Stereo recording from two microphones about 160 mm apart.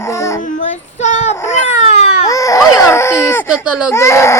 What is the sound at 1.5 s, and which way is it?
Baby cry, 45° left (ahead or behind).